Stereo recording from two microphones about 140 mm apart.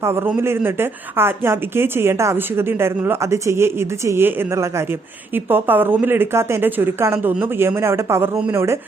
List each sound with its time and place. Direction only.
0.0 s a woman's voice: 15° right (ahead or behind)